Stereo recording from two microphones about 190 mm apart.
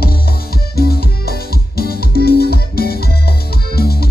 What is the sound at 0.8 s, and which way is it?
Music, 55° left (ahead or behind).